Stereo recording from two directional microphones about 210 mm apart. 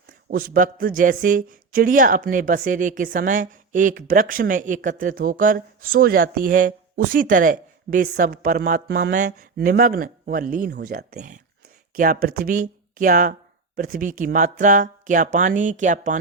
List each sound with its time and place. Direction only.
0.3 s a man's voice: 45° right (ahead or behind)